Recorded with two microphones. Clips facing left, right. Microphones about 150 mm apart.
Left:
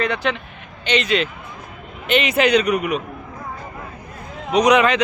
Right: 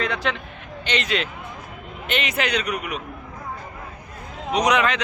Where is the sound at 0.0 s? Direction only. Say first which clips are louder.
Left 4 dB; centre (ahead or behind).